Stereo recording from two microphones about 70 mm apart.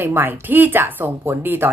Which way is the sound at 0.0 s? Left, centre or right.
Right.